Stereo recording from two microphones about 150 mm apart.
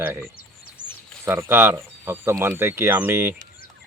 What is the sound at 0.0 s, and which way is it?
Speech, 15° right (ahead or behind).